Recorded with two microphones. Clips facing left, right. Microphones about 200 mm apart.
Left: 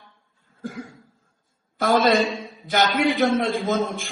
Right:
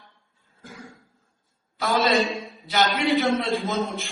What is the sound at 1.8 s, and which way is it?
A man's voice, 50° left (ahead or behind).